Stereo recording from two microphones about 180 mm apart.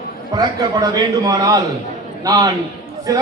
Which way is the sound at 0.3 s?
20° right (ahead or behind).